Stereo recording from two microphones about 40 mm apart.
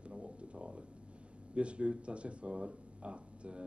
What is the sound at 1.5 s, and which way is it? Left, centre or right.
Speech, right.